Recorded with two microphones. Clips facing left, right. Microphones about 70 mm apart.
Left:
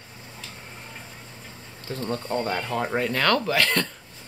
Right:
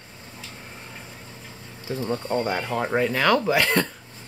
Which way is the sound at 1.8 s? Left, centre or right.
Centre.